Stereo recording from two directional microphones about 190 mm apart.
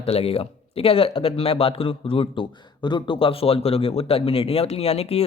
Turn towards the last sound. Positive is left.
turn(degrees=30)  # may be behind; listen again after turning